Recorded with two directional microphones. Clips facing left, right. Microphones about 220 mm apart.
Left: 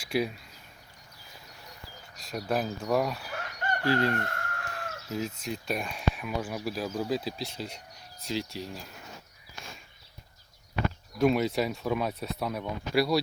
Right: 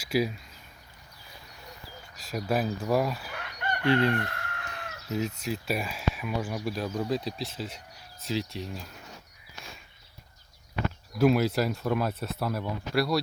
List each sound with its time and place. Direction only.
0.0 s speech: 5° right (ahead or behind)
2.1 s speech: 5° right (ahead or behind)
3.3 s fowl: 45° left (ahead or behind)
4.1 s chicken: 45° left (ahead or behind)
5.0 s speech: centre (ahead or behind)
11.2 s speech: centre (ahead or behind)